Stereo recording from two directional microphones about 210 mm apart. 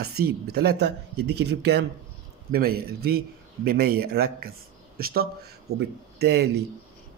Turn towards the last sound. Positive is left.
turn(degrees=-50)  # may be behind; listen again after turning